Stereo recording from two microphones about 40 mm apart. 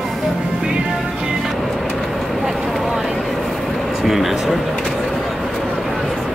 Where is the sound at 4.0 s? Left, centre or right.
Centre.